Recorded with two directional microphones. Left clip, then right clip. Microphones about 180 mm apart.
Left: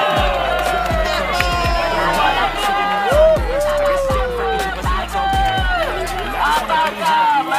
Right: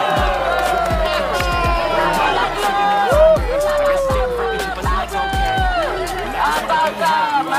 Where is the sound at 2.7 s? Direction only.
75° right (ahead or behind).